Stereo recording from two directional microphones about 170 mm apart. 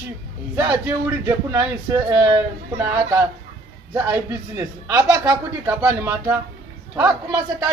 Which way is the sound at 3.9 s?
15° right (ahead or behind).